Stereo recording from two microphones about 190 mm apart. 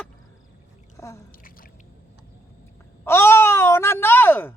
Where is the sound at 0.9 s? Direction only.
15° left (ahead or behind).